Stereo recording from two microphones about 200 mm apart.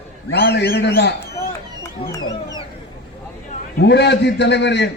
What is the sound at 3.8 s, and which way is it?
Speech, 60° left (ahead or behind).